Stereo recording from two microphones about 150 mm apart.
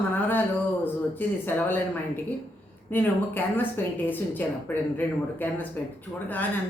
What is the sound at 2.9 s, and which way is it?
Speech, 15° left (ahead or behind).